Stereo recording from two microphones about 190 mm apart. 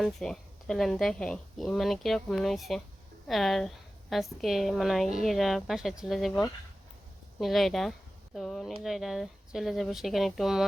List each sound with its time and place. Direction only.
0.0 s speech: centre (ahead or behind)